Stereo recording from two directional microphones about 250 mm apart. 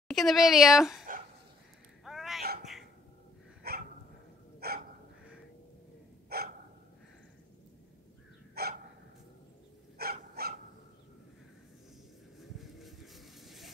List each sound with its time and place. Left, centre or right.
0.1 s speech: centre
2.0 s a sound: centre
3.6 s dog: right
6.2 s dog: right
8.6 s hiccup: right
9.9 s dog: right
12.4 s vehicle: centre